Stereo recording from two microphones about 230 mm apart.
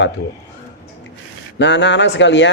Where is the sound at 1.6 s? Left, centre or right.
Left.